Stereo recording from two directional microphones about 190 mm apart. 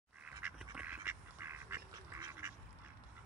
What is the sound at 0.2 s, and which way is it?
Duck, 5° right (ahead or behind).